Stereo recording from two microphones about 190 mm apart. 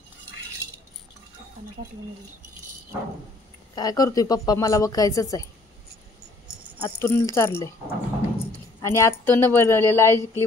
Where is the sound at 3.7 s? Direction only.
20° left (ahead or behind).